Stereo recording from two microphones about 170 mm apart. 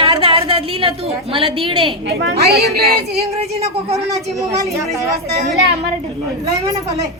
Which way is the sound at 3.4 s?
40° right (ahead or behind).